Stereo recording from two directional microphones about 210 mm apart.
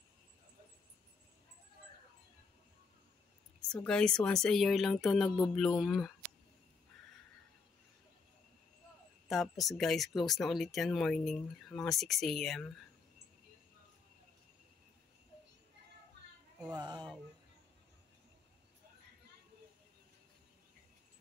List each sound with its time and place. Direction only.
3.7 s speech: 5° left (ahead or behind)
9.3 s speech: centre (ahead or behind)
16.6 s speech: 20° right (ahead or behind)